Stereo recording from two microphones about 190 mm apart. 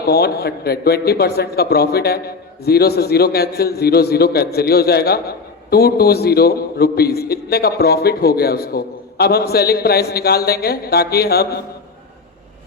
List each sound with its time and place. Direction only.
0.0 s a man's voice: 55° left (ahead or behind)